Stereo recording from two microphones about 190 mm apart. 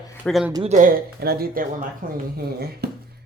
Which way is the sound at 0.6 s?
40° right (ahead or behind).